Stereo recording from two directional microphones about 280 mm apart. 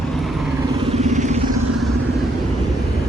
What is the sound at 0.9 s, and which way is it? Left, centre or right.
Vehicle, right.